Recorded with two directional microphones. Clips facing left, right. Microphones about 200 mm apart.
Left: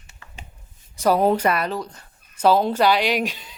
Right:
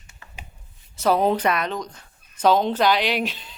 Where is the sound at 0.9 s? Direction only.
10° left (ahead or behind).